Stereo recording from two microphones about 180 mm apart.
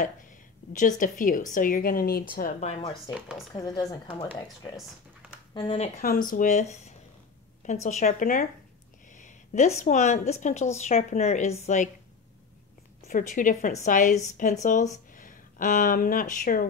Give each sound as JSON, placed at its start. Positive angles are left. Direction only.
{"t": 0.7, "sound": "a woman's voice", "side_deg": 45}
{"t": 3.1, "sound": "speech", "side_deg": -5}
{"t": 3.5, "sound": "speech", "side_deg": 20}
{"t": 5.5, "sound": "speech", "side_deg": 25}
{"t": 6.0, "sound": "a woman's voice", "side_deg": 50}
{"t": 9.1, "sound": "a sound", "side_deg": 45}
{"t": 9.8, "sound": "a woman's voice", "side_deg": 40}
{"t": 13.1, "sound": "a woman's voice", "side_deg": 50}